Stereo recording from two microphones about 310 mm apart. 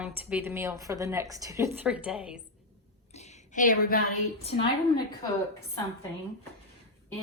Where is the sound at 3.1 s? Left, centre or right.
Left.